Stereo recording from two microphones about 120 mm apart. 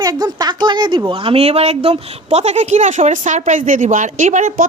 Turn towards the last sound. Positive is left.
turn(degrees=-90)